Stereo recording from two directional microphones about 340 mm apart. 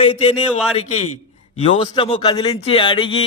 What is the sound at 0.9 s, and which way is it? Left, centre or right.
Speech, left.